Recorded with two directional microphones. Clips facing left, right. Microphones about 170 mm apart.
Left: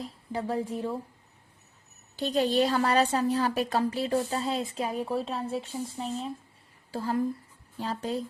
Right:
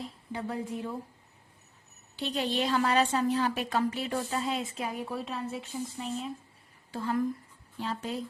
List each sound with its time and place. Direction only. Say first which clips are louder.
0.0 s speech: left 3 dB; 30° left (ahead or behind)
2.1 s a woman's voice: left 6 dB; 40° left (ahead or behind)